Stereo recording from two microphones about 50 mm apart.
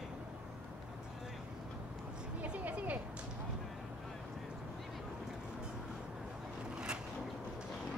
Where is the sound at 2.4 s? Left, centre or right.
Right.